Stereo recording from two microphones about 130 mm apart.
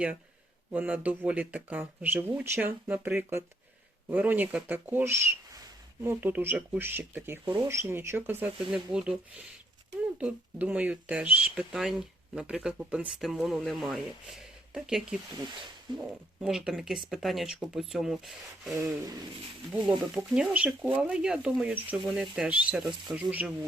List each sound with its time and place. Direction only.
0.7 s speech: 10° right (ahead or behind)
10.2 s speech: 10° right (ahead or behind)
18.8 s speech: 30° right (ahead or behind)
20.0 s speech: 5° right (ahead or behind)